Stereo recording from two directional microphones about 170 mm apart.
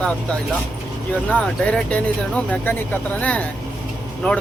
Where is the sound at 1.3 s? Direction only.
5° left (ahead or behind).